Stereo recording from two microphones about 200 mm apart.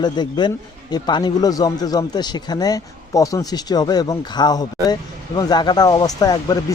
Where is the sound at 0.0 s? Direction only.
20° left (ahead or behind).